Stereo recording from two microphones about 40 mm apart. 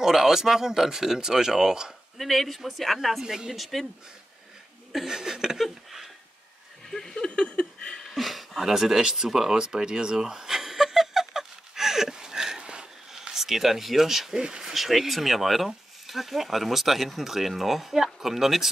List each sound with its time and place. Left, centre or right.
0.0 s speech: centre
2.1 s speech: centre
5.0 s speech: centre
5.6 s speech: centre
6.9 s a sound: centre
7.2 s a sound: left
8.1 s a sound: centre
13.1 s speech: centre
14.3 s speech: centre
14.7 s speech: centre